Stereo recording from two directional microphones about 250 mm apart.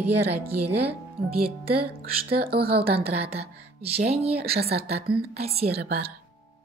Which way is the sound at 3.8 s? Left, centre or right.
Right.